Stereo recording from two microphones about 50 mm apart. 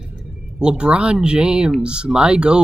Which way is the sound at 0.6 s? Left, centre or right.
Centre.